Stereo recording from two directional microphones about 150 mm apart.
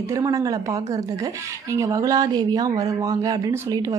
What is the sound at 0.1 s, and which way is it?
A woman's voice, 20° right (ahead or behind).